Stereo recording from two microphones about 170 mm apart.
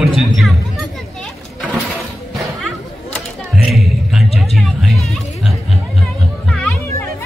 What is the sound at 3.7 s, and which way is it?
Hubbub, centre (ahead or behind).